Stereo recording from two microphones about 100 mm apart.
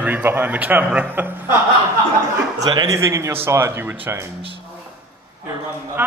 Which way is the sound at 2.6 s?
40° right (ahead or behind).